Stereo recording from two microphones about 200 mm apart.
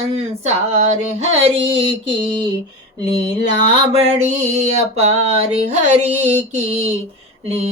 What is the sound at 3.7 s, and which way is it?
Mantra, 30° right (ahead or behind).